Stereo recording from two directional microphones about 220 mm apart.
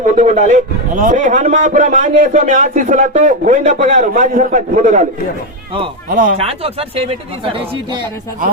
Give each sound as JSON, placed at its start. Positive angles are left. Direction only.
{"t": 0.0, "sound": "a man's voice", "side_deg": -35}
{"t": 6.1, "sound": "a man's voice", "side_deg": -40}
{"t": 6.3, "sound": "speech", "side_deg": -25}